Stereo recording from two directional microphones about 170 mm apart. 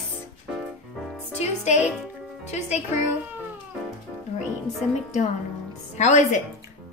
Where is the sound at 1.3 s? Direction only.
40° left (ahead or behind).